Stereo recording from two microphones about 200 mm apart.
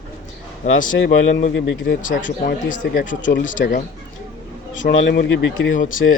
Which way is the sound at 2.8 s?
65° left (ahead or behind).